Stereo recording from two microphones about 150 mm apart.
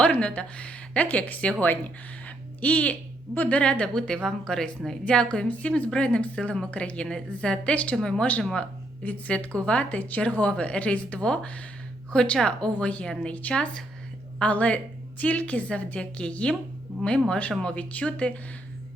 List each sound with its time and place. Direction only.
0.0 s a woman's voice: 5° left (ahead or behind)